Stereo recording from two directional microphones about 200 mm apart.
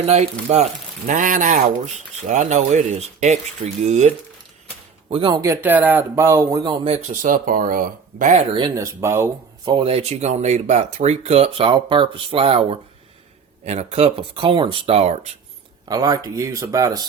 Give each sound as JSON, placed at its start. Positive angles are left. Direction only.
{"t": 0.0, "sound": "speech", "side_deg": -30}
{"t": 8.5, "sound": "speech", "side_deg": -20}
{"t": 9.7, "sound": "speech", "side_deg": -30}
{"t": 15.9, "sound": "speech", "side_deg": -20}